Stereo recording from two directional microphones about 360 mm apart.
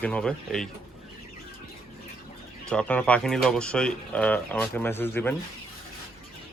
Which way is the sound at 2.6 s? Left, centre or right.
Centre.